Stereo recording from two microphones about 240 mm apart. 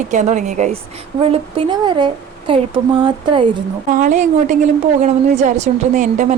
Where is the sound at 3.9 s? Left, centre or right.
Right.